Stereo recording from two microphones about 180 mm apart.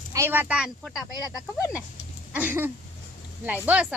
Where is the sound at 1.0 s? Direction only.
20° left (ahead or behind).